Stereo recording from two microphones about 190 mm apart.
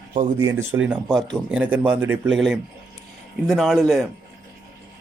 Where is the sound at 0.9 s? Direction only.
Centre (ahead or behind).